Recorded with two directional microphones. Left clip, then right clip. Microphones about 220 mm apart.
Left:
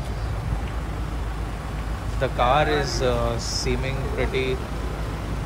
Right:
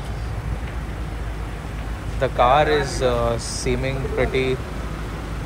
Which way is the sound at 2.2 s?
10° left (ahead or behind).